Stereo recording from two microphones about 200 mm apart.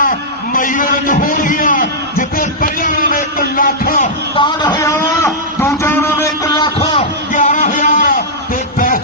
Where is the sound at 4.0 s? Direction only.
25° left (ahead or behind).